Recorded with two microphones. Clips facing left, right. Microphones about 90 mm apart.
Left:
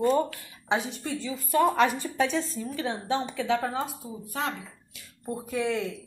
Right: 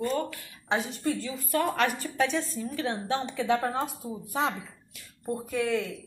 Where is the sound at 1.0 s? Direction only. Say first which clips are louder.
Right 2 dB; 5° right (ahead or behind).